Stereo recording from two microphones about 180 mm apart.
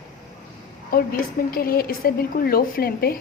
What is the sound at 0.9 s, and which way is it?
A woman's voice, 55° left (ahead or behind).